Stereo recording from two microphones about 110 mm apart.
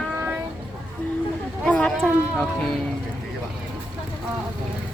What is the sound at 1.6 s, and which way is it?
Speech, 10° left (ahead or behind).